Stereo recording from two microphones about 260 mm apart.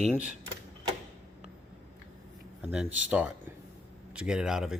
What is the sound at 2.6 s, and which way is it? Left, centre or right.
Speech, centre.